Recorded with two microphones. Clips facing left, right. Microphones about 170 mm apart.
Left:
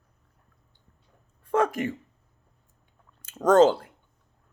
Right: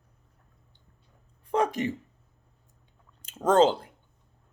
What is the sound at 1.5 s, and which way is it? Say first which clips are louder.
Speech: left 2 dB; 15° right (ahead or behind).